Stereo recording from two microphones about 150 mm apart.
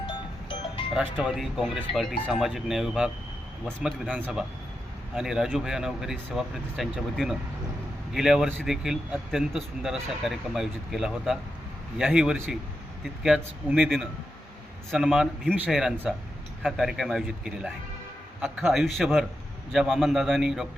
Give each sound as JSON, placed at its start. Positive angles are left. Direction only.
{"t": 0.9, "sound": "a man's voice", "side_deg": -5}